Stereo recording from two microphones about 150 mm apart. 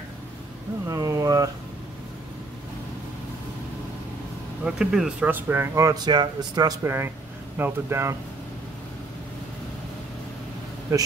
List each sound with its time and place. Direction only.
0.8 s a sound: 20° right (ahead or behind)
4.6 s speech: 5° right (ahead or behind)
10.9 s speech: 25° right (ahead or behind)